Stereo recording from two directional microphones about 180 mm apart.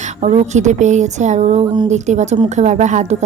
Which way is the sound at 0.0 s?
40° right (ahead or behind).